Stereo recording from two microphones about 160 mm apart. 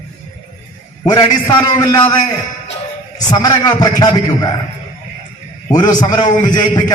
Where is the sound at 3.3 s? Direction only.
25° left (ahead or behind).